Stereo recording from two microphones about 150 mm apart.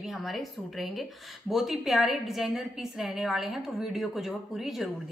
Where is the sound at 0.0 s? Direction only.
Centre (ahead or behind).